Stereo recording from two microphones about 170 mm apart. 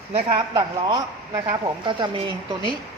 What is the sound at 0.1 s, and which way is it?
Speech, 30° right (ahead or behind).